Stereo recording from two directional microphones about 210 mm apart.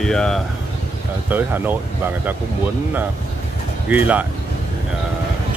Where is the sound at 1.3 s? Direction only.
10° right (ahead or behind).